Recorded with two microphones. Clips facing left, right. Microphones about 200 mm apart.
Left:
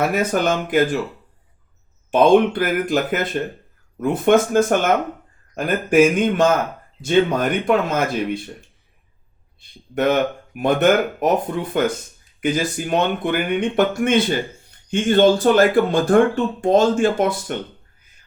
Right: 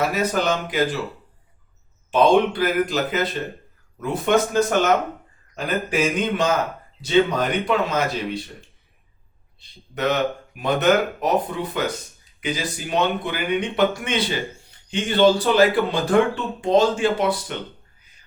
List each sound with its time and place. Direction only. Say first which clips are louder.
0.1 s speech: left 3 dB; 50° left (ahead or behind)
2.0 s speech: left 3 dB; 50° left (ahead or behind)
9.6 s speech: left 5 dB; 50° left (ahead or behind)